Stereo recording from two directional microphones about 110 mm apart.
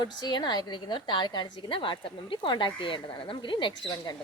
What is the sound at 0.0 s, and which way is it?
A woman's voice, 40° left (ahead or behind).